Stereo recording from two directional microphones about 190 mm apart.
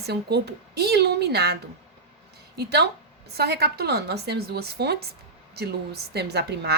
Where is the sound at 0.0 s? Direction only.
60° right (ahead or behind).